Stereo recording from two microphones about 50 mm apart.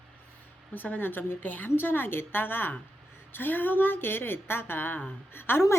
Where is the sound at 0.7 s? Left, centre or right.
Left.